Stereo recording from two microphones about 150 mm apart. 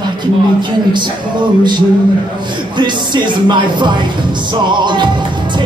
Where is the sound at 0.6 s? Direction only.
30° right (ahead or behind).